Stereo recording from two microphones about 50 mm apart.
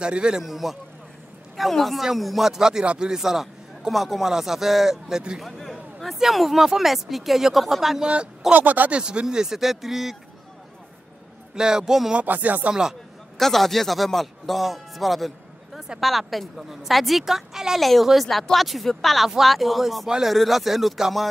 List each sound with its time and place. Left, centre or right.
0.0 s a man's voice: centre
0.4 s a man's voice: centre
5.6 s a sound: centre
6.1 s speech: centre
8.5 s speech: right
9.0 s a man's voice: centre
11.5 s a man's voice: centre
12.3 s speech: right
13.4 s speech: centre
20.1 s a man's voice: centre